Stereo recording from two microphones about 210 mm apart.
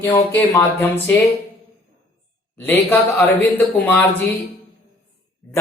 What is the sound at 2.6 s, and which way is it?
Speech, 10° left (ahead or behind).